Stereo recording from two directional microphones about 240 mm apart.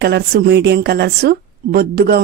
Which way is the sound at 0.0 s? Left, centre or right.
Right.